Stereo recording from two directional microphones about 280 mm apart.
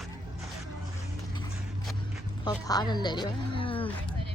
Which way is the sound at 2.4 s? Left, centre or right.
Centre.